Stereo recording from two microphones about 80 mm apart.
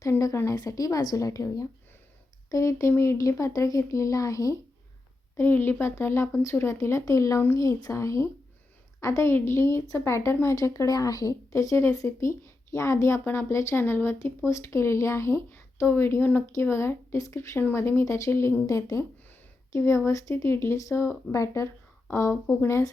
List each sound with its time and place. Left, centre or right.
0.2 s a woman's voice: left
5.4 s speech: left
17.6 s speech: left